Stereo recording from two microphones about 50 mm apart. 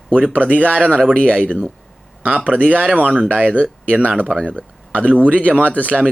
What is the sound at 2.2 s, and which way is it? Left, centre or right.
Speech, right.